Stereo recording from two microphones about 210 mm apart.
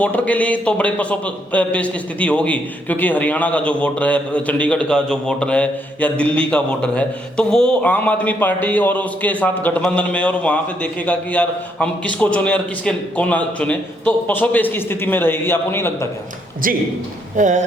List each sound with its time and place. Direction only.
0.0 s a man's voice: 5° left (ahead or behind)
17.3 s speech: 35° right (ahead or behind)